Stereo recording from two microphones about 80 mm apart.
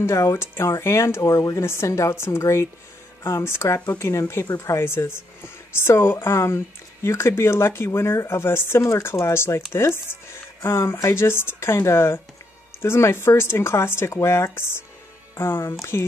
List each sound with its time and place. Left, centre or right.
0.0 s a woman's voice: left